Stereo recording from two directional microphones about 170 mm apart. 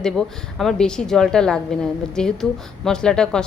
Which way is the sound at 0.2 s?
5° left (ahead or behind).